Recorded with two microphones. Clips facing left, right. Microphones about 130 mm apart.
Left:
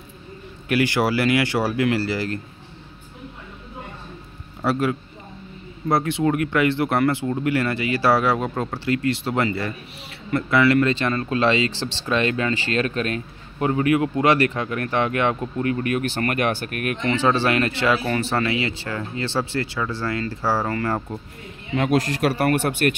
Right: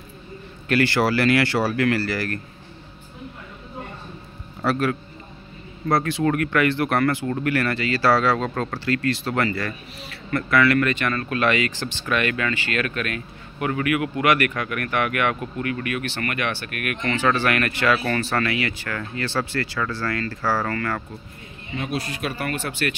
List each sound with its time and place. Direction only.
0.7 s speech: 15° left (ahead or behind)
4.6 s speech: 20° left (ahead or behind)
21.7 s speech: 75° left (ahead or behind); by 22.9 s 55° left (ahead or behind)